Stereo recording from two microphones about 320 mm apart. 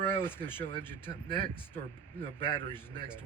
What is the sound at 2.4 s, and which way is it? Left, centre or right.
Speech, centre.